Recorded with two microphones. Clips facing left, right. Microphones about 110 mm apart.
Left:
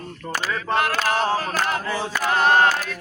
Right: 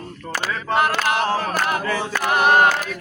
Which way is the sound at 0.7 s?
20° right (ahead or behind).